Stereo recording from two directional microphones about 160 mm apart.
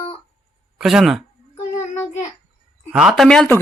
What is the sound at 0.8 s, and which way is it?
Speech, centre (ahead or behind).